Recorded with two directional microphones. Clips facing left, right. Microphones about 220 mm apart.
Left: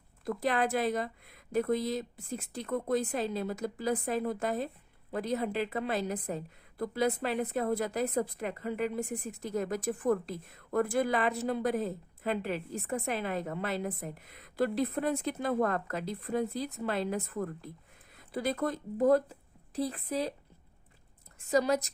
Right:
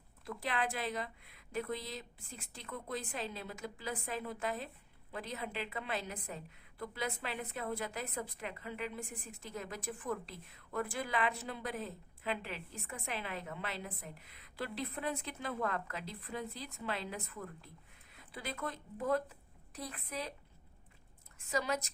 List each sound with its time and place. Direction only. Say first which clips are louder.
0.3 s a woman's voice: left 8 dB; 40° left (ahead or behind)
21.5 s a woman's voice: left 9 dB; 35° left (ahead or behind)